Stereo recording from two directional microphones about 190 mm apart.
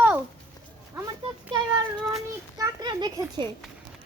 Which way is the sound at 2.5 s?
20° right (ahead or behind).